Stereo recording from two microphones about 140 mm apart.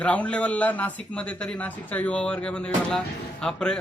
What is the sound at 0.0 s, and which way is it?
Speech, 10° left (ahead or behind).